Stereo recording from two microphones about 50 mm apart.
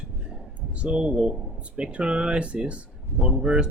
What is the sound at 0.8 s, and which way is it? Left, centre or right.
Speech, right.